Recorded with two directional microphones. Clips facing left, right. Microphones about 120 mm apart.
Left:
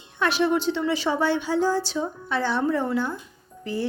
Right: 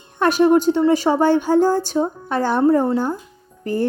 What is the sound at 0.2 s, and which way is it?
A woman's voice, 45° right (ahead or behind).